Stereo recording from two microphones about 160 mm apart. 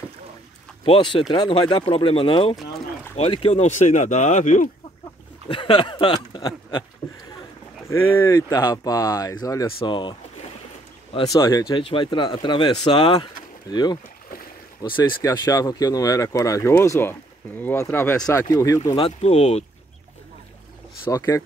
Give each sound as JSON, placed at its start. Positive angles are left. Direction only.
{"t": 0.8, "sound": "speech", "side_deg": 35}
{"t": 5.5, "sound": "speech", "side_deg": 30}
{"t": 7.0, "sound": "a sound", "side_deg": 40}
{"t": 7.9, "sound": "speech", "side_deg": 15}
{"t": 11.3, "sound": "speech", "side_deg": 20}
{"t": 18.8, "sound": "speech", "side_deg": 40}
{"t": 21.0, "sound": "speech", "side_deg": 15}